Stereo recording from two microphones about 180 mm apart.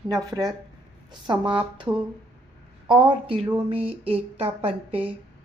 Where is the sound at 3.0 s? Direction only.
30° right (ahead or behind).